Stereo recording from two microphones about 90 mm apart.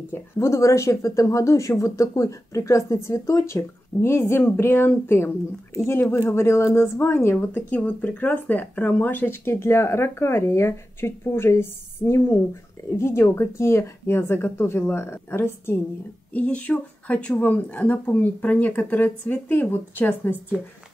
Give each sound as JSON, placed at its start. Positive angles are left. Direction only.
{"t": 0.1, "sound": "speech", "side_deg": 35}
{"t": 7.3, "sound": "speech", "side_deg": 15}
{"t": 16.3, "sound": "speech", "side_deg": 15}